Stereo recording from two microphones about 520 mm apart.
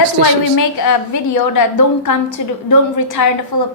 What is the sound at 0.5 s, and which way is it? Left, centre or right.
A woman's voice, left.